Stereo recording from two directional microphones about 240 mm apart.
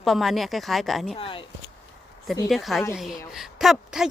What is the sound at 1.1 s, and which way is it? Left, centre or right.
Speech, left.